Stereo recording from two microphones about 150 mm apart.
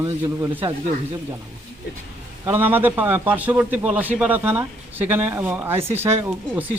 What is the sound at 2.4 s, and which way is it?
A man's voice, 15° right (ahead or behind).